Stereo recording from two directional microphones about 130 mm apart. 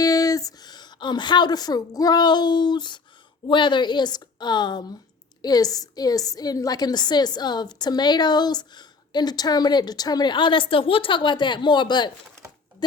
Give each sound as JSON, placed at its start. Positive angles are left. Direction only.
{"t": 0.0, "sound": "a woman's voice", "side_deg": 30}